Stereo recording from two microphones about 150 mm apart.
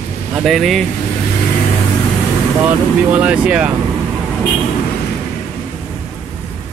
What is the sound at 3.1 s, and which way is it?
Speech, 10° right (ahead or behind).